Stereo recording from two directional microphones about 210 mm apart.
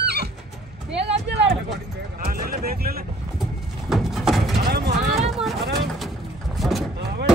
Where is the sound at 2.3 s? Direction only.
45° right (ahead or behind).